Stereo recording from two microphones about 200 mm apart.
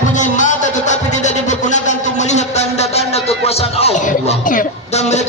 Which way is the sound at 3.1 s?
30° left (ahead or behind).